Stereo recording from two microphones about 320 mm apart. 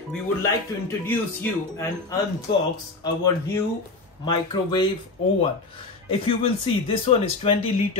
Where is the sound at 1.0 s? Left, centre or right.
Centre.